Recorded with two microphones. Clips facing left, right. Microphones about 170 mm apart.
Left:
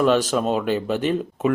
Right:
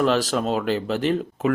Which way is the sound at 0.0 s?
15° left (ahead or behind).